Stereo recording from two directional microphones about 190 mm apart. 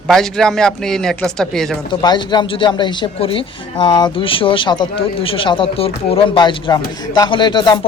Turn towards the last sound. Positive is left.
turn(degrees=25)  # may be behind; listen again after turning